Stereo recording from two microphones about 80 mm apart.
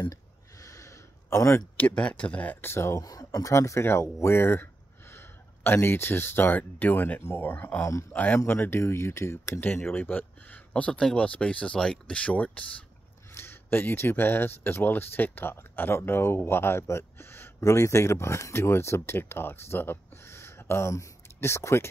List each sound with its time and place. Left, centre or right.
0.1 s a sound: left
1.8 s speech: centre; by 3.0 s left
3.0 s speech: left; by 12.6 s centre
13.3 s speech: left